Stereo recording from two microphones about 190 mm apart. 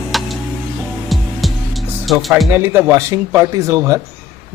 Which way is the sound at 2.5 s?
10° right (ahead or behind).